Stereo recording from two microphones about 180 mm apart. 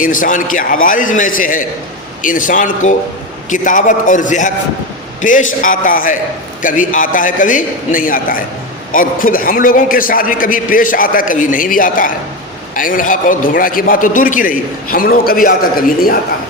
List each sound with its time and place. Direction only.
0.0 s a man's voice: 50° left (ahead or behind)